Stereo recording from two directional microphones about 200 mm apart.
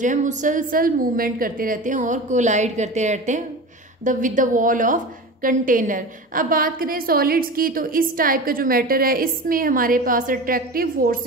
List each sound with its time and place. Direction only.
0.0 s a woman's voice: 40° right (ahead or behind)